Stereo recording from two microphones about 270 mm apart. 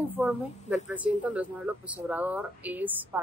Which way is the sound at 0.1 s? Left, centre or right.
Centre.